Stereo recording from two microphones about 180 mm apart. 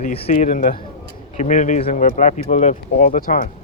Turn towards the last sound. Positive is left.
turn(degrees=50)  # may be behind; listen again after turning